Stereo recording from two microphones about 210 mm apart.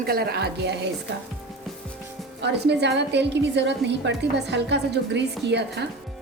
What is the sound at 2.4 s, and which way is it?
A woman's voice, 55° right (ahead or behind).